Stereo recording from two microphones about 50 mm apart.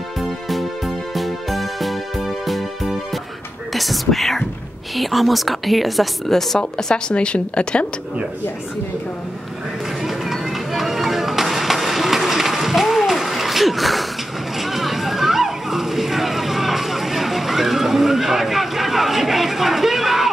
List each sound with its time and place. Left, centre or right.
0.2 s music: centre
3.7 s a woman's voice: centre; by 7.8 s left
10.0 s music: centre
14.6 s a sound: centre